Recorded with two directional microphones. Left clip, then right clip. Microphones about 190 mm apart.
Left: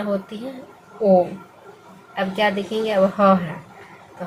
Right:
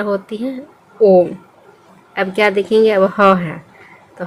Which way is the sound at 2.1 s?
55° right (ahead or behind).